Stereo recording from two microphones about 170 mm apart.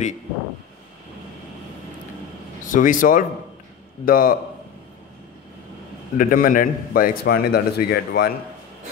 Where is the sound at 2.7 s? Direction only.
50° left (ahead or behind).